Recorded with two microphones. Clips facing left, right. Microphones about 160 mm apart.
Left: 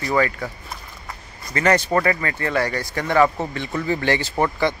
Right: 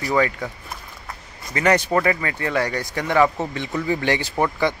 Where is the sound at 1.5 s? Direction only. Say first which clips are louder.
Even; 15° right (ahead or behind).